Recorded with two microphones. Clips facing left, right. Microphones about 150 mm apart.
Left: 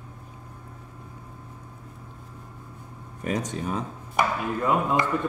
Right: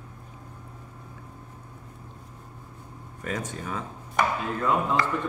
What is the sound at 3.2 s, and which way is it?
A man's voice, 20° left (ahead or behind).